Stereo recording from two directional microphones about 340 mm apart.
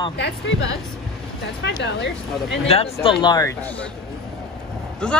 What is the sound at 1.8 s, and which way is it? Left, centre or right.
Speech, left.